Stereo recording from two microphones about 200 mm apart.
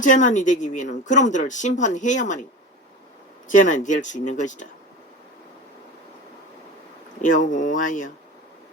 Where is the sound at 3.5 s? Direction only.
40° left (ahead or behind).